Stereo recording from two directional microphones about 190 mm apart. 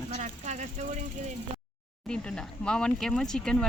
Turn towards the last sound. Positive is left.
turn(degrees=5)  # may be behind; listen again after turning